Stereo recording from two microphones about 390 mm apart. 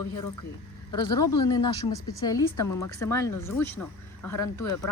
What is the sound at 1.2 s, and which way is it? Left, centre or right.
Speech, left.